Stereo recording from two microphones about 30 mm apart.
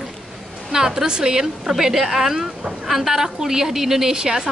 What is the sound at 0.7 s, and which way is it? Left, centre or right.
A woman's voice, centre.